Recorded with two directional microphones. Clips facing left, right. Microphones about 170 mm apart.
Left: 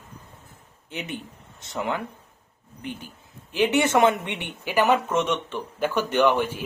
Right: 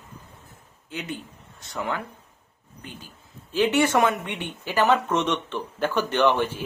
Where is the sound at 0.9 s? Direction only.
20° left (ahead or behind).